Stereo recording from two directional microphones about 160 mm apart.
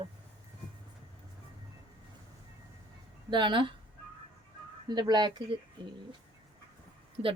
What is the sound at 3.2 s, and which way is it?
Speech, 30° right (ahead or behind).